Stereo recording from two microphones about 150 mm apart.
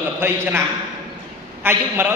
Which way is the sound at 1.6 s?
15° right (ahead or behind).